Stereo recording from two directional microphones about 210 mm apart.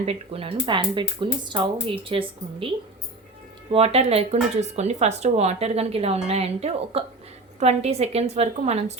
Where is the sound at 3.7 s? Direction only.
30° right (ahead or behind).